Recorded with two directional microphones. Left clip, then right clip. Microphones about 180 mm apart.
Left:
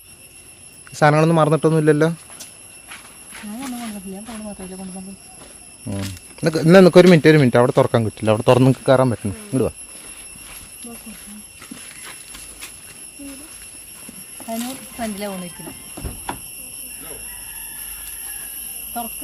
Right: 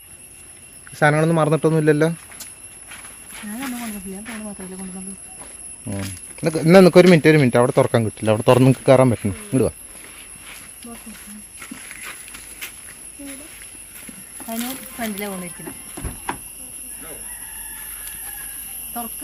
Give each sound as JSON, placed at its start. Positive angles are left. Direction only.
{"t": 0.9, "sound": "speech", "side_deg": 15}
{"t": 5.8, "sound": "speech", "side_deg": 10}
{"t": 8.7, "sound": "speech", "side_deg": -20}
{"t": 14.9, "sound": "speech", "side_deg": -10}
{"t": 16.0, "sound": "a sound", "side_deg": 10}